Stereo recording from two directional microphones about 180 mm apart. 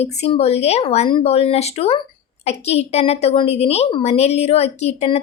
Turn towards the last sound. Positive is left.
turn(degrees=35)  # may be behind; listen again after turning